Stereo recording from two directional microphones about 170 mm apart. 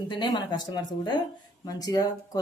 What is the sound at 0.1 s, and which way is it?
Speech, 25° left (ahead or behind).